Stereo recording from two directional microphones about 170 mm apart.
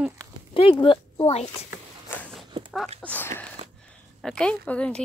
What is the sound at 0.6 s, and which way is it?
Speech, 30° left (ahead or behind).